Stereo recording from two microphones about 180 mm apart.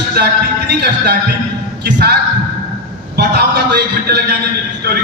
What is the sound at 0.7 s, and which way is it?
A man's voice, 65° right (ahead or behind).